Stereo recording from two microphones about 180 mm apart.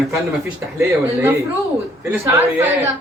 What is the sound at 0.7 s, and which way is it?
A woman's voice, 15° right (ahead or behind).